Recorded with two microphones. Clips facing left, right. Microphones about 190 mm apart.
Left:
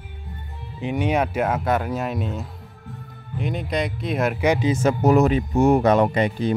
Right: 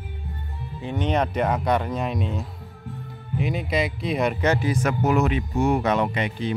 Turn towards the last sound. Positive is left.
turn(degrees=40)  # may be behind; listen again after turning